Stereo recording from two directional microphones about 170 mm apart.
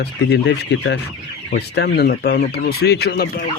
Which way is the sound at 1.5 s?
75° left (ahead or behind).